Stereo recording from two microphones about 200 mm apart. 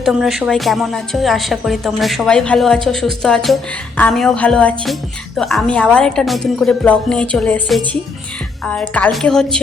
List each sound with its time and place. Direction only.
0.0 s a woman's voice: centre (ahead or behind)